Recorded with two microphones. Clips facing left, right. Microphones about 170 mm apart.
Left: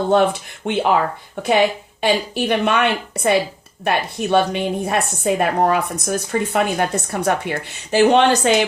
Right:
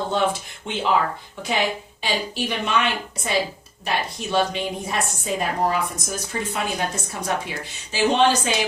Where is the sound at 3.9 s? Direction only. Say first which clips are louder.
Left 7 dB; 60° left (ahead or behind).